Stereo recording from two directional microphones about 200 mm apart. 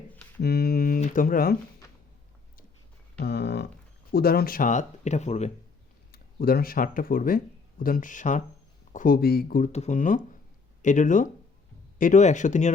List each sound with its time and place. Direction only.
0.4 s speech: 50° left (ahead or behind)
3.2 s a sound: 55° left (ahead or behind)
4.1 s speech: 50° left (ahead or behind); by 5.5 s 35° left (ahead or behind)
6.1 s speech: 50° left (ahead or behind)
9.7 s speech: 35° left (ahead or behind)